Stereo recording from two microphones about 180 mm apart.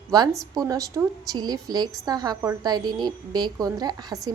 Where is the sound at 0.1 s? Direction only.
20° right (ahead or behind).